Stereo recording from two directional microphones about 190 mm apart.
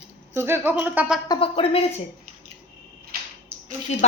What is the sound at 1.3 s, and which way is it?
Speech, 30° left (ahead or behind).